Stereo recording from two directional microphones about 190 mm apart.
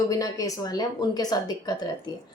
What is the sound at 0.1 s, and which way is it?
A woman's voice, 20° left (ahead or behind).